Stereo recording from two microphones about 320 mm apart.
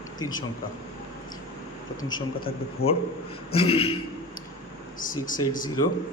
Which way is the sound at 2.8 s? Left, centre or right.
Left.